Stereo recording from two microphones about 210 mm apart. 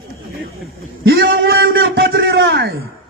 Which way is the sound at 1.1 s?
45° right (ahead or behind).